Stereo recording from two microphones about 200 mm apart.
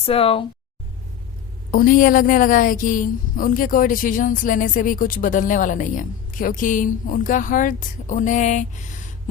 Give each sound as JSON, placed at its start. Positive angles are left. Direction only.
{"t": 0.0, "sound": "speech", "side_deg": 30}
{"t": 1.7, "sound": "a woman's voice", "side_deg": 45}